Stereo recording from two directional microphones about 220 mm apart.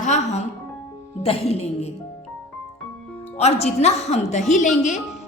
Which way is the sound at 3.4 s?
30° left (ahead or behind).